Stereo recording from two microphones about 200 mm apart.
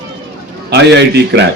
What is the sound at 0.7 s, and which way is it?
Speech, 60° right (ahead or behind).